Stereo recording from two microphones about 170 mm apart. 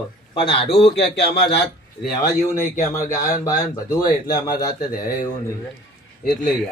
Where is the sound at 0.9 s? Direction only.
75° left (ahead or behind).